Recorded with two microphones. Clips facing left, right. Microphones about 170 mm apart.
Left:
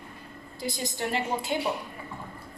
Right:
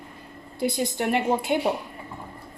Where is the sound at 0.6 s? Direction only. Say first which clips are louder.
Right 7 dB; 60° right (ahead or behind).